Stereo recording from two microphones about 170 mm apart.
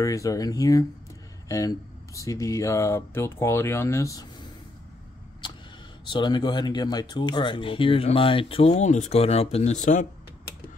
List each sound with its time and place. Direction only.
0.0 s speech: 20° left (ahead or behind)
6.0 s speech: 25° left (ahead or behind); by 10.0 s 45° left (ahead or behind)